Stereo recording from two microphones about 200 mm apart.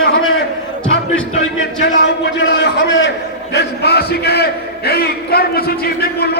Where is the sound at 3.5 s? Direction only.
55° left (ahead or behind).